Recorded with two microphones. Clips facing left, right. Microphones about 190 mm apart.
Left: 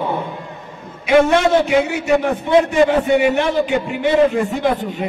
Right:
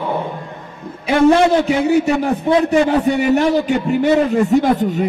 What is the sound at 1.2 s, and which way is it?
A man's voice, 35° right (ahead or behind).